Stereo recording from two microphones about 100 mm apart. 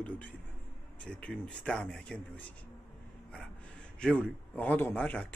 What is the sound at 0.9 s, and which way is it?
A man's voice, 10° left (ahead or behind).